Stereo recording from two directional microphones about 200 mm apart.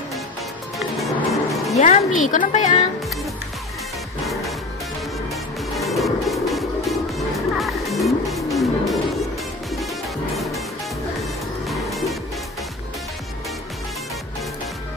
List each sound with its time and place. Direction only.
0.7 s music: centre (ahead or behind)
1.8 s speech: 35° left (ahead or behind)
5.8 s music: centre (ahead or behind)
10.3 s music: centre (ahead or behind)
11.6 s music: centre (ahead or behind)